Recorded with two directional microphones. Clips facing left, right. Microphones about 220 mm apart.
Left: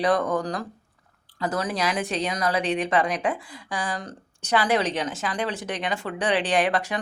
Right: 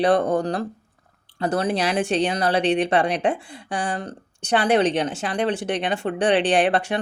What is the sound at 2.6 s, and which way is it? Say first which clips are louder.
Speech: right 5 dB; 75° right (ahead or behind).